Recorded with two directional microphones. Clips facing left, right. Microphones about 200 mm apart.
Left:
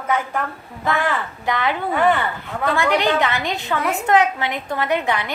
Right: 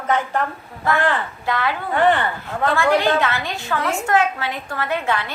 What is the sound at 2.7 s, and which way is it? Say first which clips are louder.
A woman's voice: right 1 dB; 15° left (ahead or behind).